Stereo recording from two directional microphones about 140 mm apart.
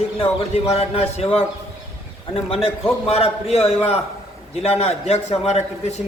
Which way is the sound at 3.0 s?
45° left (ahead or behind).